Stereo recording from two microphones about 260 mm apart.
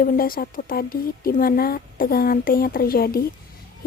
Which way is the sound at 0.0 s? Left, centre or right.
Left.